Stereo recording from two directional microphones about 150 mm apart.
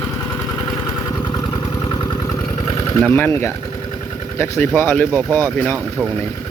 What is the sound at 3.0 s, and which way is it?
Speech, 15° left (ahead or behind).